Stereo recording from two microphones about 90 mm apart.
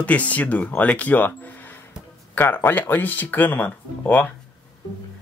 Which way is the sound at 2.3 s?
20° left (ahead or behind).